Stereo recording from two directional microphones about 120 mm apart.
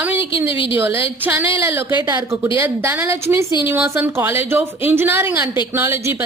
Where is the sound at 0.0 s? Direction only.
15° right (ahead or behind).